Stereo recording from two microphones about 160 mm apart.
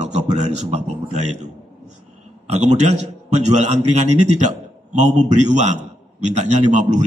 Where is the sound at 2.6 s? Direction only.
45° right (ahead or behind).